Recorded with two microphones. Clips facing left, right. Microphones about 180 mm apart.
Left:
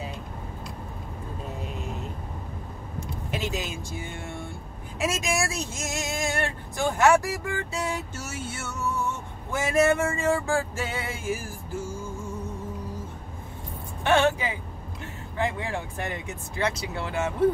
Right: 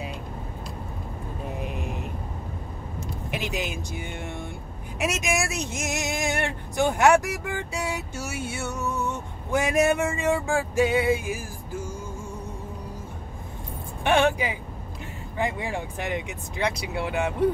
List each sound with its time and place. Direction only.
3.3 s speech: 15° right (ahead or behind)
14.0 s speech: 15° right (ahead or behind)